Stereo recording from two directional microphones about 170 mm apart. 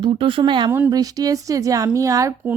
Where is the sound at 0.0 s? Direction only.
30° right (ahead or behind).